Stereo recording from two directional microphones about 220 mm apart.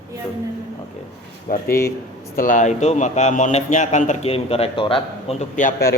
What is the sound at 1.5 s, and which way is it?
A man's voice, 40° left (ahead or behind).